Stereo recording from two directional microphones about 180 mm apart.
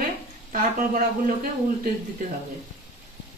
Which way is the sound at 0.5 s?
45° right (ahead or behind).